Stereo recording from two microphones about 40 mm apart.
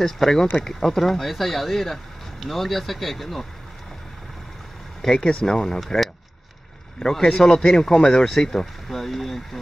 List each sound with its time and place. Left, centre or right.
0.0 s speech: centre
5.0 s speech: centre
7.0 s speech: centre
8.8 s speech: centre